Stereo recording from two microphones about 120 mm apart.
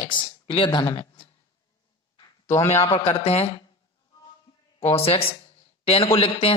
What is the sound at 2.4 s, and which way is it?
Speech, 20° left (ahead or behind).